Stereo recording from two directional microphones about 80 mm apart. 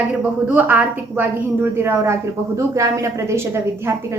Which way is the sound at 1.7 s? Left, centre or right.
Right.